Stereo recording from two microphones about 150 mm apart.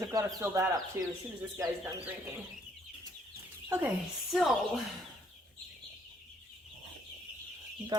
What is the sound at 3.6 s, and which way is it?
Speech, 15° right (ahead or behind).